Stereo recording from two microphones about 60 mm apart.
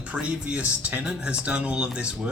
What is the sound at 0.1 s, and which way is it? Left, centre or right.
Speech, right.